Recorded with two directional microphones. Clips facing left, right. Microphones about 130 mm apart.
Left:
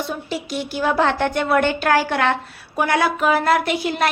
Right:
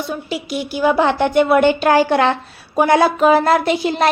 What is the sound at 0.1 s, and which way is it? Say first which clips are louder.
A woman's voice: right 3 dB; 5° right (ahead or behind).